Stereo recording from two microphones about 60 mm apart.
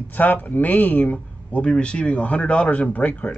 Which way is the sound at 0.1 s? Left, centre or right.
Left.